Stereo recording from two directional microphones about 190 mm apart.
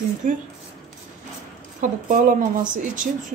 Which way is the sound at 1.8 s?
45° right (ahead or behind).